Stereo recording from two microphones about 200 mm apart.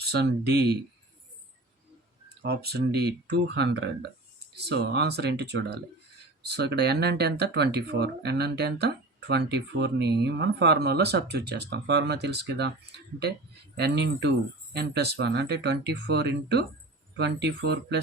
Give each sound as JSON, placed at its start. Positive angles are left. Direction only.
{"t": 0.0, "sound": "speech", "side_deg": -55}
{"t": 2.4, "sound": "speech", "side_deg": -55}
{"t": 13.7, "sound": "speech", "side_deg": -55}